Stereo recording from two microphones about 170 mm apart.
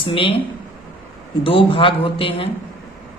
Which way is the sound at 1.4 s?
30° left (ahead or behind).